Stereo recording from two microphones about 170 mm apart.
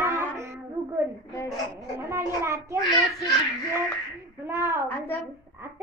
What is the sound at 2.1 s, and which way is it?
Speech, 15° right (ahead or behind).